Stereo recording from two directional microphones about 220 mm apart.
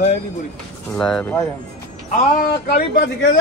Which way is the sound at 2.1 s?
40° left (ahead or behind).